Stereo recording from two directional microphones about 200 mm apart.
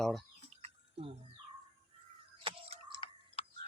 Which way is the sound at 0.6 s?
30° right (ahead or behind).